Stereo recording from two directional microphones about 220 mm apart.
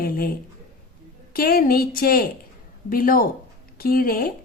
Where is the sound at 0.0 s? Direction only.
40° left (ahead or behind).